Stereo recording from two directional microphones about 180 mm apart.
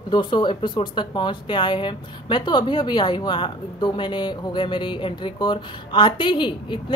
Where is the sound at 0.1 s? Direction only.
25° left (ahead or behind).